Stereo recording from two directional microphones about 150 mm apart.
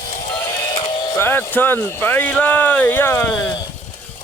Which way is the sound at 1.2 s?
15° left (ahead or behind).